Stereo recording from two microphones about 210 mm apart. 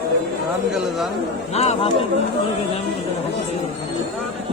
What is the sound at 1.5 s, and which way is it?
Speech, 30° left (ahead or behind).